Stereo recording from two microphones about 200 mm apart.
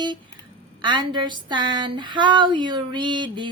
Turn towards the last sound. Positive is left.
turn(degrees=-25)  # may be behind; listen again after turning